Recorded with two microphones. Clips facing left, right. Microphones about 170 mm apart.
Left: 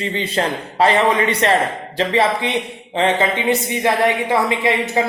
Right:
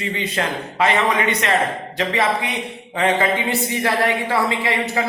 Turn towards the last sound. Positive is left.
turn(degrees=20)  # may be behind; listen again after turning